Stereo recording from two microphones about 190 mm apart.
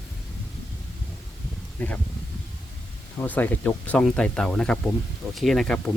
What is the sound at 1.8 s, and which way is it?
Speech, 10° left (ahead or behind).